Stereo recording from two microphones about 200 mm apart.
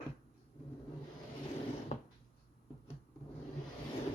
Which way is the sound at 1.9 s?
30° left (ahead or behind).